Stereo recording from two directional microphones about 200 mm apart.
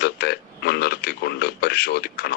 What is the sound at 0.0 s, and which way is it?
A man's voice, 55° left (ahead or behind).